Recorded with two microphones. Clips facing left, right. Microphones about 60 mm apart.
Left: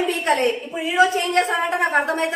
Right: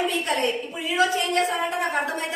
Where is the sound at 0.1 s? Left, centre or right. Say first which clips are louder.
Left 5 dB; left.